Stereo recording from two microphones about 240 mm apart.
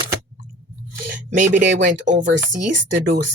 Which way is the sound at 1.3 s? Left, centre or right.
Right.